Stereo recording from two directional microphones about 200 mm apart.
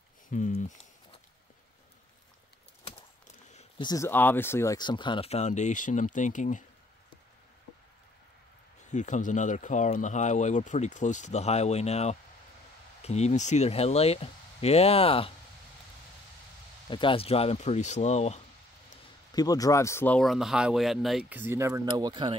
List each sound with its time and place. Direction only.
0.3 s a sound: 40° left (ahead or behind)
3.5 s speech: 25° left (ahead or behind)
8.9 s speech: 40° left (ahead or behind)
16.9 s speech: 25° left (ahead or behind)
19.3 s speech: 20° left (ahead or behind); by 22.4 s 25° right (ahead or behind)